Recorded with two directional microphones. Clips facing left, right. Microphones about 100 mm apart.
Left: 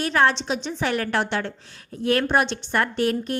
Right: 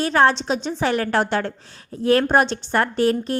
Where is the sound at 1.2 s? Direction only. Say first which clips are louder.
Right 4 dB; 40° right (ahead or behind).